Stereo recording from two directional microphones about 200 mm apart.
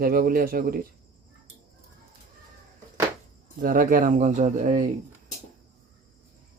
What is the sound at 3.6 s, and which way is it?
Speech, 45° right (ahead or behind).